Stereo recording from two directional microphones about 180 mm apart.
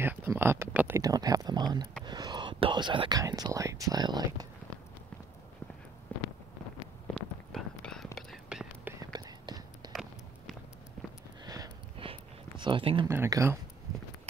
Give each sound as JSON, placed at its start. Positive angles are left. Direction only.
{"t": 0.0, "sound": "speech", "side_deg": -10}
{"t": 6.1, "sound": "wind noise", "side_deg": 10}
{"t": 7.5, "sound": "whispering", "side_deg": 5}
{"t": 9.0, "sound": "whispering", "side_deg": -20}
{"t": 11.4, "sound": "a sound", "side_deg": -20}
{"t": 13.1, "sound": "speech", "side_deg": -15}